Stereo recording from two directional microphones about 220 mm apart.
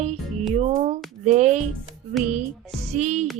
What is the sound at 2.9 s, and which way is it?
Speech, 30° right (ahead or behind).